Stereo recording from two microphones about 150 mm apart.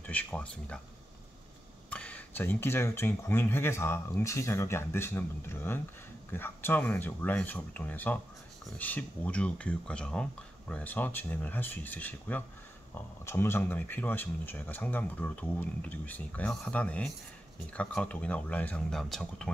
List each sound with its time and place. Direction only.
0.0 s speech: 10° left (ahead or behind)
1.9 s speech: 10° left (ahead or behind)